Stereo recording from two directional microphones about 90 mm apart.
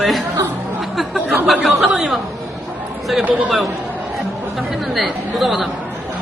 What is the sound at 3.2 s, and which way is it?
Speech, 15° right (ahead or behind).